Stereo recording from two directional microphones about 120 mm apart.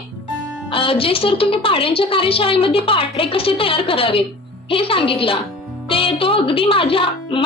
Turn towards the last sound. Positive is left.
turn(degrees=50)  # may be behind; listen again after turning